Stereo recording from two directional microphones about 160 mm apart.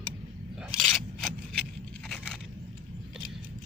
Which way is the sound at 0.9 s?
Centre (ahead or behind).